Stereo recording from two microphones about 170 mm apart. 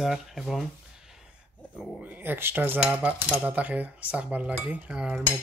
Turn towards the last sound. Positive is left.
turn(degrees=-5)  # may be behind; listen again after turning